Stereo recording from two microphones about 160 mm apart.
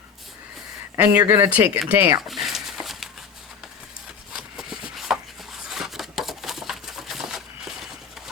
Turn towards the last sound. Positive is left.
turn(degrees=-5)  # may be behind; listen again after turning